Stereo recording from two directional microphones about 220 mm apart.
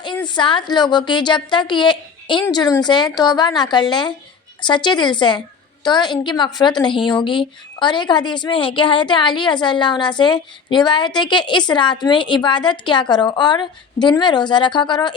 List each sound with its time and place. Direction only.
0.3 s a woman's voice: 20° left (ahead or behind)